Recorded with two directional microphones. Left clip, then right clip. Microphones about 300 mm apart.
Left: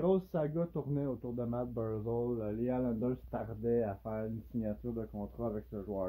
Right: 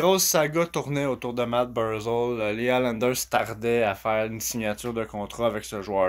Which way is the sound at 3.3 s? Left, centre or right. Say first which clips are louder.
Right 12 dB; centre.